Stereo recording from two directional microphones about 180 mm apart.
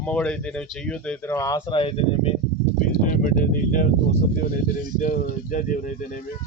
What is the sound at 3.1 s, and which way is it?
Speech, 50° left (ahead or behind).